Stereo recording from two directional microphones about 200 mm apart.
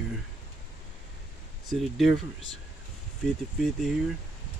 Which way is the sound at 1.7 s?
Centre (ahead or behind).